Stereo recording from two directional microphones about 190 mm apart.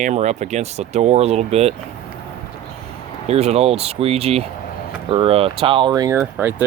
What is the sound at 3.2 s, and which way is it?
Speech, 35° right (ahead or behind).